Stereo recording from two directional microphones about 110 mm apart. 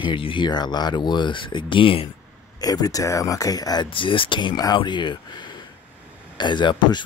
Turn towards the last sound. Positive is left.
turn(degrees=45)  # may be behind; listen again after turning